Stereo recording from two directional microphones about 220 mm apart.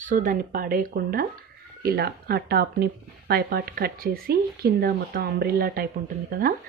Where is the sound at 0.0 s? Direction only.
35° right (ahead or behind).